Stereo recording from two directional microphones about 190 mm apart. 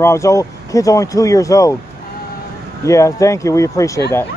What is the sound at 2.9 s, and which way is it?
A man's voice, 15° left (ahead or behind).